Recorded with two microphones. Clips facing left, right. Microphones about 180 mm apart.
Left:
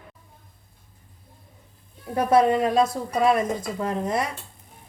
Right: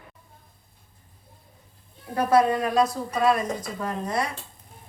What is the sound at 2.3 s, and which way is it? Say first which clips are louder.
Speech: left 2 dB; 25° left (ahead or behind).